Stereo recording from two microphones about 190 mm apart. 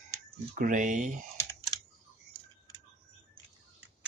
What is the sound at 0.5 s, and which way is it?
Speech, 45° right (ahead or behind).